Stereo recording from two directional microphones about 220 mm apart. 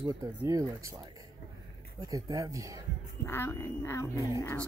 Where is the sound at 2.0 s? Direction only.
15° right (ahead or behind).